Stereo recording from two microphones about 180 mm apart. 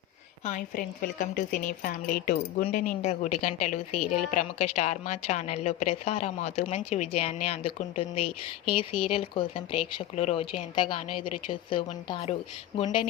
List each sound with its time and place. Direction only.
0.4 s a woman's voice: 45° left (ahead or behind)
2.7 s a woman's voice: 45° left (ahead or behind); by 13.1 s 25° left (ahead or behind)